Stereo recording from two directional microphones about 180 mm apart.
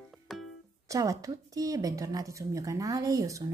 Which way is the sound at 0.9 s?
20° right (ahead or behind).